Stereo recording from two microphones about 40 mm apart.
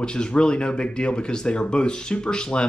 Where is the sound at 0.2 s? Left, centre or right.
Left.